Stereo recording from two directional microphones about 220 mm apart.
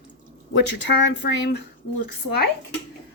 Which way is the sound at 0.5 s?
50° left (ahead or behind).